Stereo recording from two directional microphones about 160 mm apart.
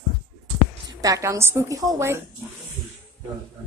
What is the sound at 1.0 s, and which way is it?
A woman's voice, 20° right (ahead or behind).